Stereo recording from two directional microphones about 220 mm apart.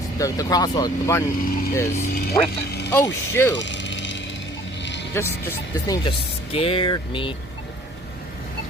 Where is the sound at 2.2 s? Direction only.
45° left (ahead or behind).